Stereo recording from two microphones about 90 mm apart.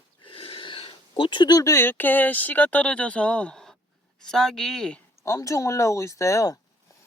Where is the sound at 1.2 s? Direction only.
60° left (ahead or behind).